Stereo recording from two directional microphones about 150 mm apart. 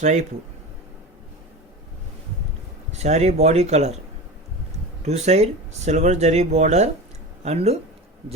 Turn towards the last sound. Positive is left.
turn(degrees=-45)  # may be behind; listen again after turning